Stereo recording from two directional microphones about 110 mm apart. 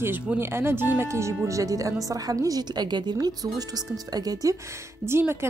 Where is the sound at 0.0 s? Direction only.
20° right (ahead or behind).